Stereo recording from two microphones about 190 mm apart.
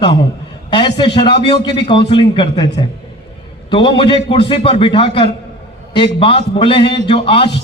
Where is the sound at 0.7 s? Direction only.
25° left (ahead or behind).